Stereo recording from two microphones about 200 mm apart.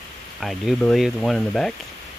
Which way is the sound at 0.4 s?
Centre (ahead or behind).